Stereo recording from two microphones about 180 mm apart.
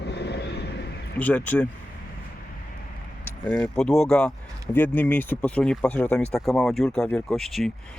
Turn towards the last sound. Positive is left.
turn(degrees=0)  # may be behind; listen again after turning